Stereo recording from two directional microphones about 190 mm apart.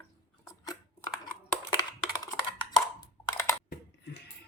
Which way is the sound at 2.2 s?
20° left (ahead or behind).